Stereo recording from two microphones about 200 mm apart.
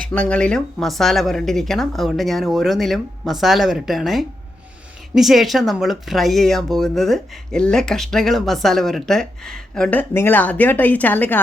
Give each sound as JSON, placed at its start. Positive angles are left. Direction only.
{"t": 0.1, "sound": "speech", "side_deg": 5}